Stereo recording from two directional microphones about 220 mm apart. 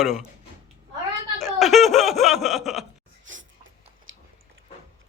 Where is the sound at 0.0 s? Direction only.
Centre (ahead or behind).